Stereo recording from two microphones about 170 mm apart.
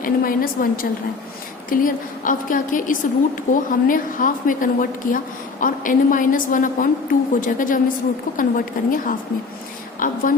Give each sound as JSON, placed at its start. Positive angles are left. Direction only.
{"t": 0.0, "sound": "a woman's voice", "side_deg": 55}